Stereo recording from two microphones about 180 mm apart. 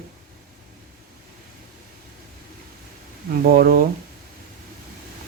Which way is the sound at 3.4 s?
55° right (ahead or behind).